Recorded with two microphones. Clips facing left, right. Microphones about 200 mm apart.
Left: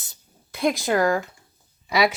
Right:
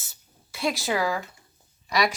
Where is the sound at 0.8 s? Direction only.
5° right (ahead or behind).